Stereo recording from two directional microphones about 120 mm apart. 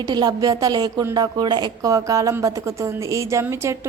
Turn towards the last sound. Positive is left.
turn(degrees=-25)  # may be behind; listen again after turning